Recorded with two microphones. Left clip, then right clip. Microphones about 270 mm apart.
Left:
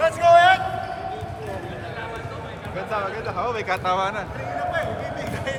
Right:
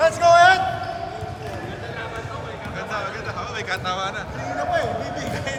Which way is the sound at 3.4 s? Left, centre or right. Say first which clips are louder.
Left 3 dB; left.